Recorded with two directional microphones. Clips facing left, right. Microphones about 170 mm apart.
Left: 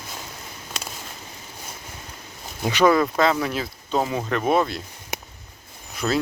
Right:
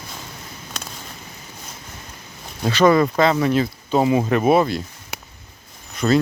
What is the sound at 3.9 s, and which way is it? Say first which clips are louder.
Speech: right 6 dB; 10° right (ahead or behind).